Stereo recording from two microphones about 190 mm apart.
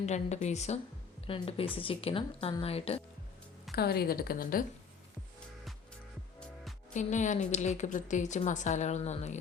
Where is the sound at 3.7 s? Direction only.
55° left (ahead or behind).